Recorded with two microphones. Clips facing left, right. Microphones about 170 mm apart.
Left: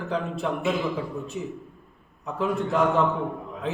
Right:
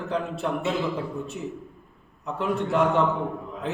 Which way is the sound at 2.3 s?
Centre (ahead or behind).